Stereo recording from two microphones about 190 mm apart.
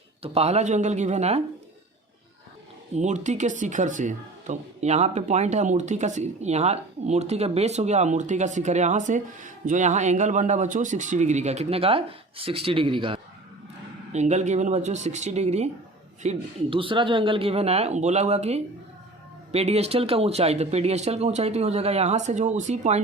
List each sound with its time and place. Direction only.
0.2 s speech: 35° right (ahead or behind)
2.9 s speech: 40° right (ahead or behind)
14.1 s speech: 35° right (ahead or behind)